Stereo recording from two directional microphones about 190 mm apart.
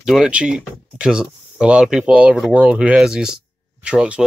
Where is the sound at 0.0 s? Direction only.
Centre (ahead or behind).